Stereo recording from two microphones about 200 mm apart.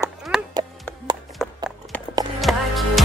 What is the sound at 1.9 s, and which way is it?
Music, 10° left (ahead or behind).